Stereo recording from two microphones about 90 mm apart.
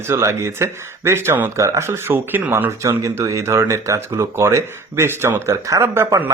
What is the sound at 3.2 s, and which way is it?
Speech, 35° right (ahead or behind).